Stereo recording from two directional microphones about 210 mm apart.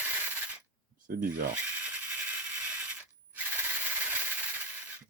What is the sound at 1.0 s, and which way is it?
Speech, 40° right (ahead or behind).